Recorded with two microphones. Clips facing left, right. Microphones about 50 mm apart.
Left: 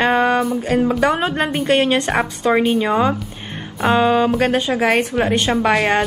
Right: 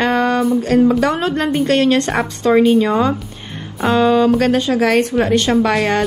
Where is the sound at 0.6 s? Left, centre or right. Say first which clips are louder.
Right 3 dB; centre.